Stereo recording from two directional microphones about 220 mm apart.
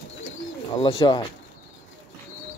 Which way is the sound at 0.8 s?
20° left (ahead or behind).